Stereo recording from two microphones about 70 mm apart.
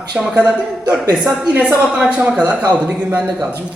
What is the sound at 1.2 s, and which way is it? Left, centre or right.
Speech, centre.